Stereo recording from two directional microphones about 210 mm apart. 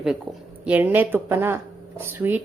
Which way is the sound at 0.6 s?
10° right (ahead or behind).